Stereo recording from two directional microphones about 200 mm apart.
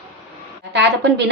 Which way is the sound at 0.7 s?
60° right (ahead or behind).